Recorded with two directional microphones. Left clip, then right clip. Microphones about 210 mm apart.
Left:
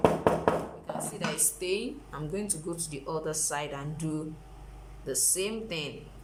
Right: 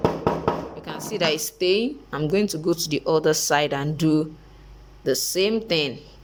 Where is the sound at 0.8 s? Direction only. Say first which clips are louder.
Right 10 dB; 40° right (ahead or behind).